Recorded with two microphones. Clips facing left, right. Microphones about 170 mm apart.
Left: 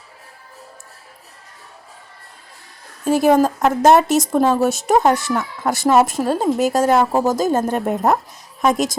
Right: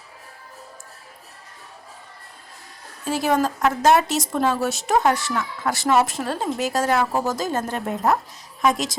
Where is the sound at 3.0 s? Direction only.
50° left (ahead or behind).